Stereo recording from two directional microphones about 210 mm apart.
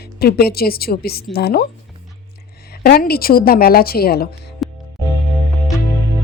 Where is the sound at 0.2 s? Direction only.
50° left (ahead or behind).